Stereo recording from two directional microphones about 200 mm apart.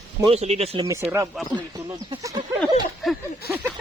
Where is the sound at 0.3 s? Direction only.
30° right (ahead or behind).